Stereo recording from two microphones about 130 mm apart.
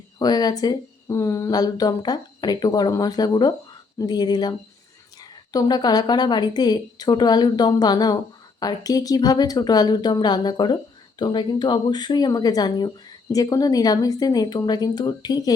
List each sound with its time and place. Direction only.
0.2 s speech: 30° left (ahead or behind)